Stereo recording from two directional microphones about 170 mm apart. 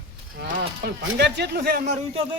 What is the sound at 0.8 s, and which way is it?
Speech, 80° right.